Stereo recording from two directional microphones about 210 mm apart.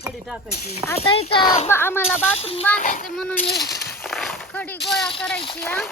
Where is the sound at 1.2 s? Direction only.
30° left (ahead or behind).